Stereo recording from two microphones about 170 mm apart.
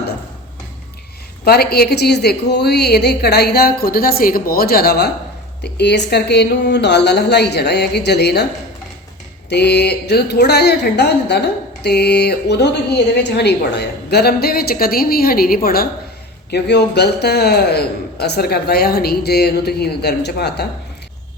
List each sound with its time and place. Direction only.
1.5 s a woman's voice: 65° left (ahead or behind)
5.6 s a woman's voice: 80° left
9.5 s a woman's voice: 80° left; by 15.9 s 60° left (ahead or behind)
16.5 s a woman's voice: 80° left